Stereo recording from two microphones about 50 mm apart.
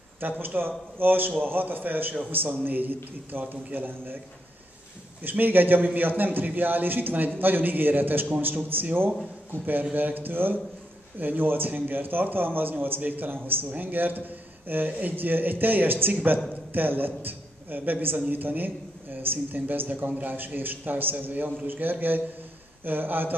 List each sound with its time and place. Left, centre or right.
0.4 s a man's voice: right
5.2 s a man's voice: right